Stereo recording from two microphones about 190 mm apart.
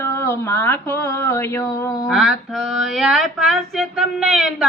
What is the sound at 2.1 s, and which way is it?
Speech, centre (ahead or behind).